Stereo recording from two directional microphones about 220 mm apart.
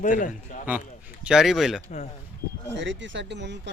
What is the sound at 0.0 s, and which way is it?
Speech, 35° left (ahead or behind).